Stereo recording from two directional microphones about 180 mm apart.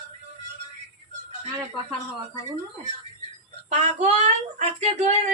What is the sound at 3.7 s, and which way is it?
Speech, 35° right (ahead or behind).